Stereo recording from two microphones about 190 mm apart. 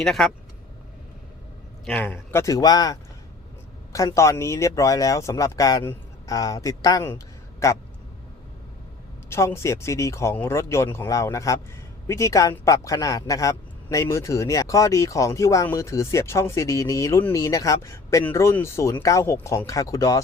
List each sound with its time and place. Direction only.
0.0 s speech: centre (ahead or behind)
1.8 s a man's voice: 5° left (ahead or behind)
9.3 s a man's voice: 15° left (ahead or behind)